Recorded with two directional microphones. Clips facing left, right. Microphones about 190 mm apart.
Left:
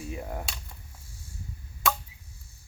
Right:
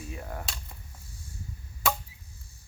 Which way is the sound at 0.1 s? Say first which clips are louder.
Left 3 dB; 15° left (ahead or behind).